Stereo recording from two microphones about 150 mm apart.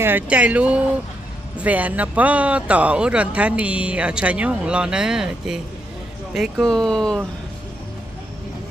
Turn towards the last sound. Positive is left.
turn(degrees=5)  # may be behind; listen again after turning